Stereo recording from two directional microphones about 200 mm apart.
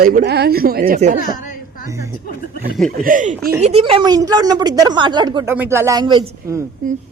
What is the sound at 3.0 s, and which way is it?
Speech, 40° right (ahead or behind).